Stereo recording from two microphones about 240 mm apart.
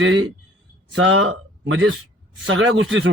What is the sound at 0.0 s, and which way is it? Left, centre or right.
A man's voice, right.